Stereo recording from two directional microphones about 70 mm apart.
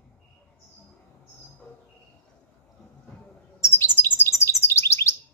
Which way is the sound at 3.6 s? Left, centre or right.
Left.